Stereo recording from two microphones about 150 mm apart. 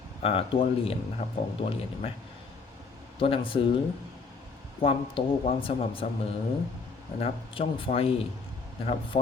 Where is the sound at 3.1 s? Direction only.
35° left (ahead or behind).